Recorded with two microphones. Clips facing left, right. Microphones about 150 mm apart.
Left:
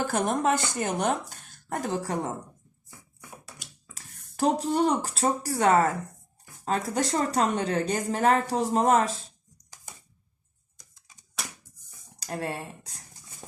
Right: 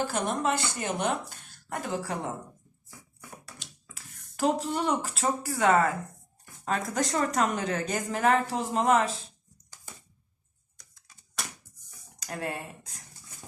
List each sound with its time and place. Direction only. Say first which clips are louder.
0.0 s a woman's voice: left 3 dB; 45° left (ahead or behind)
3.9 s a woman's voice: left 6 dB; 35° left (ahead or behind)
12.2 s a woman's voice: left 2 dB; 35° left (ahead or behind)